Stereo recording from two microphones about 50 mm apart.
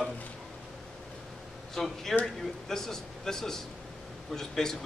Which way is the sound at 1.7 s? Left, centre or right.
Centre.